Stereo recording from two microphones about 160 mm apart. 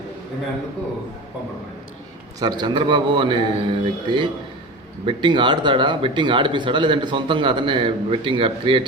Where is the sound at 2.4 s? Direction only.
25° right (ahead or behind).